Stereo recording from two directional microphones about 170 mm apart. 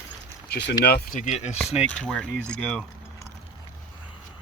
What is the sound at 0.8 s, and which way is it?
Speech, 70° left (ahead or behind).